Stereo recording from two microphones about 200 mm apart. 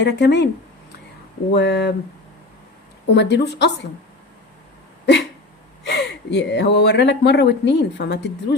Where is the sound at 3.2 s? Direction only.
60° left (ahead or behind).